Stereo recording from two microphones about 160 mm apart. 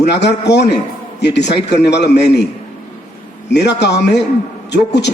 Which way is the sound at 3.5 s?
90° left.